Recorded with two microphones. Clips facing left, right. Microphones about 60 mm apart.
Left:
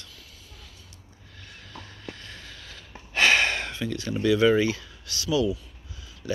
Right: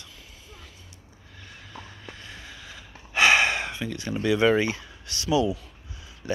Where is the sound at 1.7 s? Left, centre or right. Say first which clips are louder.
Left 2 dB; centre.